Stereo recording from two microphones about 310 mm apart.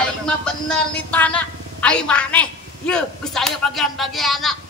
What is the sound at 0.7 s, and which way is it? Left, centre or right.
Speech, centre.